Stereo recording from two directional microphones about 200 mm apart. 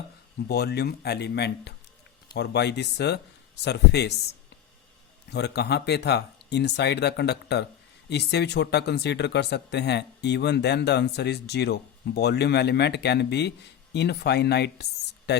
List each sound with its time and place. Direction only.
0.4 s speech: 55° left (ahead or behind)
5.3 s speech: 55° left (ahead or behind)
15.3 s a sound: 55° left (ahead or behind)